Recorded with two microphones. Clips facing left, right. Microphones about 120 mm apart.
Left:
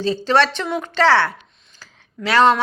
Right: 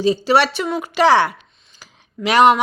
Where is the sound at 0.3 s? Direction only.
10° right (ahead or behind).